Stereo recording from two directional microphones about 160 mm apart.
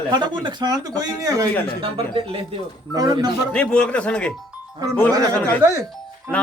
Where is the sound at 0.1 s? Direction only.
30° right (ahead or behind).